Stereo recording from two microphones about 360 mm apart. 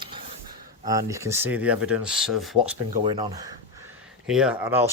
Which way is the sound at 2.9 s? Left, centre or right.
Centre.